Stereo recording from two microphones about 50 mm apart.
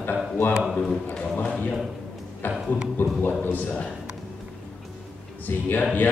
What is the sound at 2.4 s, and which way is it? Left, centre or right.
Speech, left.